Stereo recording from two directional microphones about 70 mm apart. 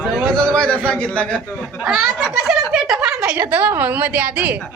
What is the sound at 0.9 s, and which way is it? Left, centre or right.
Speech, centre.